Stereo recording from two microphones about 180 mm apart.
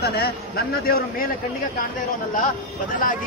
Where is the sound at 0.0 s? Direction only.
60° left (ahead or behind).